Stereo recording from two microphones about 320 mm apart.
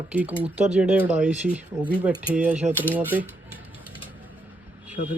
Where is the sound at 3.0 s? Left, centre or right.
Centre.